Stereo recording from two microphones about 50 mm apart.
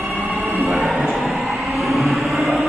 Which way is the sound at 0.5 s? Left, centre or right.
Right.